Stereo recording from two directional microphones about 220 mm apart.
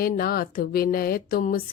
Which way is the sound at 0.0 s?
40° left (ahead or behind).